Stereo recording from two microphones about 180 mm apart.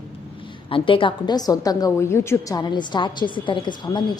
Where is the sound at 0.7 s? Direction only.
30° left (ahead or behind).